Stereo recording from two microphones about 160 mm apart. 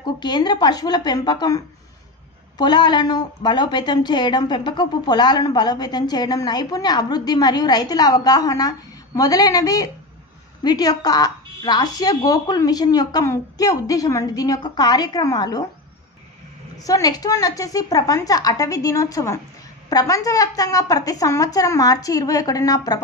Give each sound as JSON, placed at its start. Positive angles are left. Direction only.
{"t": 0.0, "sound": "a woman's voice", "side_deg": 25}
{"t": 16.7, "sound": "a woman's voice", "side_deg": 20}